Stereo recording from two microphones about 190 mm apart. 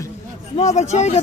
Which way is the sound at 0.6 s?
35° left (ahead or behind).